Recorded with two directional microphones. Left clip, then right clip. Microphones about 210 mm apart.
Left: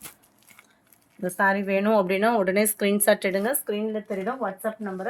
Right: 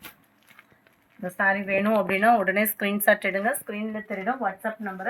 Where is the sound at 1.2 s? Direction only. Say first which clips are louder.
Left 1 dB; 60° left (ahead or behind).